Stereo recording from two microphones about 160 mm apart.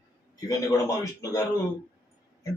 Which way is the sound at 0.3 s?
20° left (ahead or behind).